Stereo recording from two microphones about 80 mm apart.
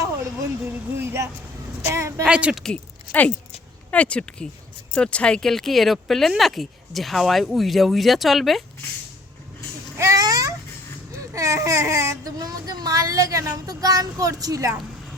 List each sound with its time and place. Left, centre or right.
0.6 s a sound: right
1.9 s a woman's voice: right
2.2 s speech: centre
2.7 s speech: centre
10.0 s a sound: right
11.2 s speech: right